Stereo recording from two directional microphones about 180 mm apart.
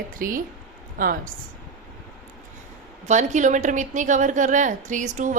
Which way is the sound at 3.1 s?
40° right (ahead or behind).